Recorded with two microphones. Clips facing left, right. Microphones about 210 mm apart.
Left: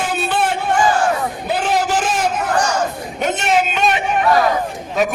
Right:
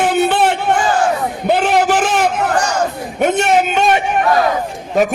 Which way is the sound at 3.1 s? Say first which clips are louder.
Right 4 dB; 55° right (ahead or behind).